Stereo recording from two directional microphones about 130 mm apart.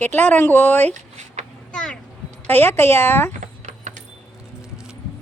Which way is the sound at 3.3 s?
70° right (ahead or behind).